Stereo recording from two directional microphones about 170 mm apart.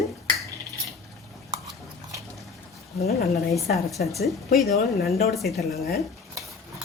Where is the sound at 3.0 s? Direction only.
40° left (ahead or behind).